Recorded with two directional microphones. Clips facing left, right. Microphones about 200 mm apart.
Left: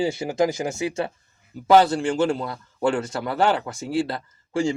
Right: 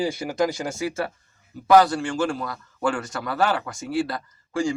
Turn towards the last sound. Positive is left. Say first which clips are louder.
# left 1 dB
turn(degrees=25)  # may be behind; listen again after turning